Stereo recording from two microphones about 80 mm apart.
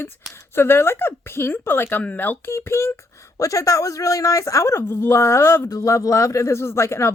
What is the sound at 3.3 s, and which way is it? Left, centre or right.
Speech, left.